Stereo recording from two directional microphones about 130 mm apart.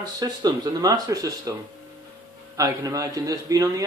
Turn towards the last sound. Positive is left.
turn(degrees=-25)  # may be behind; listen again after turning